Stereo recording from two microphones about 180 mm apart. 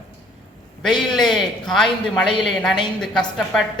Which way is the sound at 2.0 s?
5° left (ahead or behind).